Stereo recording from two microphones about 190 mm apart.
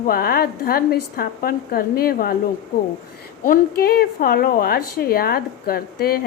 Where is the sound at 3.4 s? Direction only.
50° left (ahead or behind).